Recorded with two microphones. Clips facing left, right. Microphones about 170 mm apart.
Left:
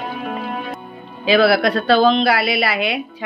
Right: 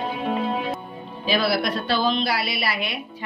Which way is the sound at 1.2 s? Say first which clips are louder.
Left 8 dB; 80° left.